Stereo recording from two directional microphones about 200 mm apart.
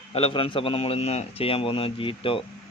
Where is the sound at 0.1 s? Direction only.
30° left (ahead or behind).